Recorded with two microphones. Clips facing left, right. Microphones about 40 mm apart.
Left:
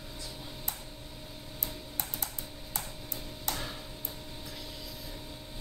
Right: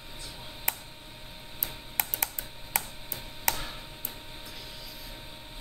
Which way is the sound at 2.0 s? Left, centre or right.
Right.